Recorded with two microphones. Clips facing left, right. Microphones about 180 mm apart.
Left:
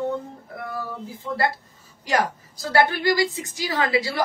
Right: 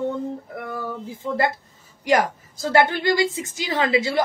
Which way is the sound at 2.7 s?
20° right (ahead or behind).